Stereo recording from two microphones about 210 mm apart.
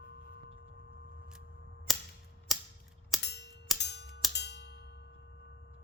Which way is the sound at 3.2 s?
55° left (ahead or behind).